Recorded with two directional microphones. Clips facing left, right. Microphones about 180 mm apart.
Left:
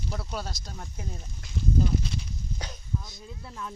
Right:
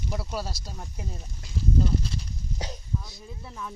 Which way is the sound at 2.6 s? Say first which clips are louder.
Right 2 dB; 35° right (ahead or behind).